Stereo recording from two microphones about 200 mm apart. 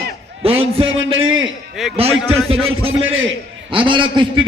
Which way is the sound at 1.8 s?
Centre (ahead or behind).